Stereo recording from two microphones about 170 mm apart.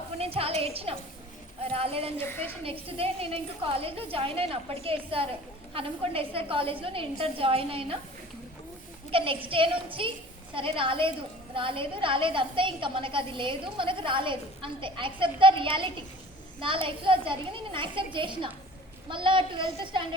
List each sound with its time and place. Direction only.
0.2 s a woman's voice: 35° right (ahead or behind)
2.2 s a woman's voice: 15° left (ahead or behind)
2.6 s a woman's voice: 35° right (ahead or behind)
9.1 s a woman's voice: 30° right (ahead or behind)